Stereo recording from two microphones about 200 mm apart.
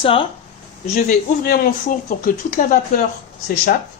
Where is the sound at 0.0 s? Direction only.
25° left (ahead or behind).